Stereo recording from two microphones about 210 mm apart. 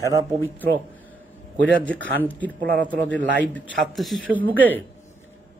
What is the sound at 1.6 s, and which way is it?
Speech, 5° left (ahead or behind).